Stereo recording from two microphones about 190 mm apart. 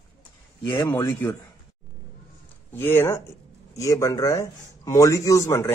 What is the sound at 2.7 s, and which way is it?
Speech, 10° left (ahead or behind).